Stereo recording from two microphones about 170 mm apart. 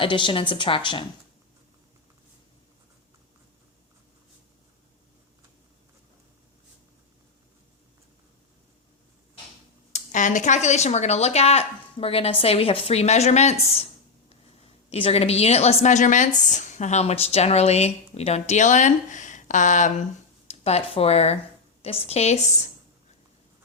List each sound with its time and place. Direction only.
0.0 s a woman's voice: 30° left (ahead or behind)
9.9 s a woman's voice: 45° left (ahead or behind)
14.8 s a woman's voice: 35° left (ahead or behind)